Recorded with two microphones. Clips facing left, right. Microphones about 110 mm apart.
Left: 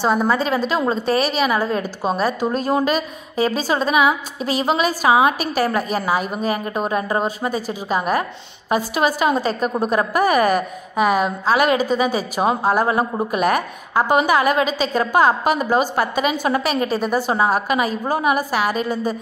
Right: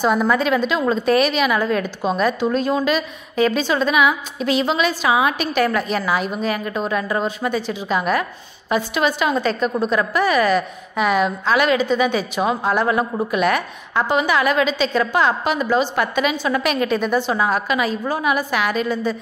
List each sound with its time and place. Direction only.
0.0 s a woman's voice: 30° left (ahead or behind)
12.8 s speech: 30° left (ahead or behind)
13.3 s a woman's voice: 40° left (ahead or behind)